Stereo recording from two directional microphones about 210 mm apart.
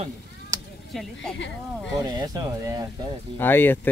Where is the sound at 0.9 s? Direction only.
Centre (ahead or behind).